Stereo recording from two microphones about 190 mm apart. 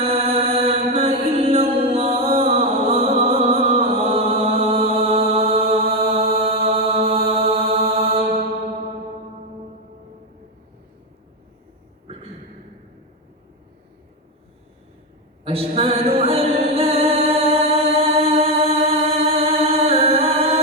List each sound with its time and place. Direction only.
0.0 s mantra: 30° right (ahead or behind)
15.4 s a sound: 30° right (ahead or behind)
18.1 s chant: 30° right (ahead or behind)